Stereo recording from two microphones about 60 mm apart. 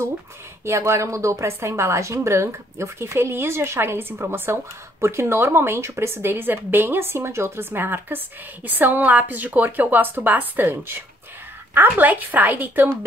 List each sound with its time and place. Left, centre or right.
0.7 s a woman's voice: right